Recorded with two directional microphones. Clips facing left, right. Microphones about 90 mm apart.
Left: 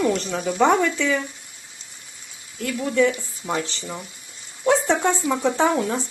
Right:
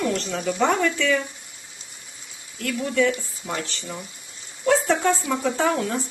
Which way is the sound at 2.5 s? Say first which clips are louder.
Left 2 dB; 5° left (ahead or behind).